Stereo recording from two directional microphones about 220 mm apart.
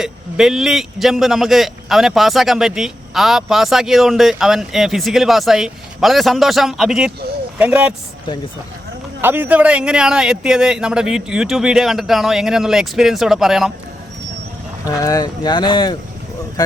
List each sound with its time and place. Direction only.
0.0 s speech: centre (ahead or behind)
9.2 s speech: 10° right (ahead or behind)
14.8 s speech: 15° left (ahead or behind)